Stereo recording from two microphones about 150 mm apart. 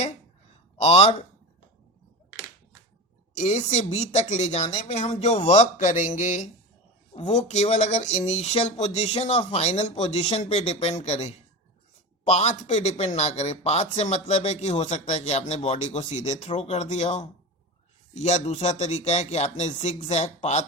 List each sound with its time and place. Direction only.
0.8 s speech: 45° left (ahead or behind)
3.3 s speech: 50° left (ahead or behind)